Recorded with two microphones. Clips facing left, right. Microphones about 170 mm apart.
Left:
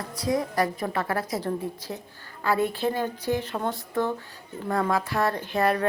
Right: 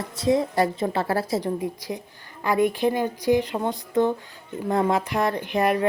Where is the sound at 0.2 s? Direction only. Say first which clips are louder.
Right 4 dB; 25° right (ahead or behind).